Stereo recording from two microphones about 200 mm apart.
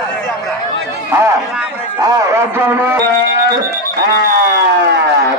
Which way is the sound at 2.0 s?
10° right (ahead or behind).